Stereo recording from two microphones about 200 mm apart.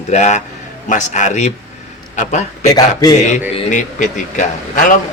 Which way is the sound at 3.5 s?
35° left (ahead or behind).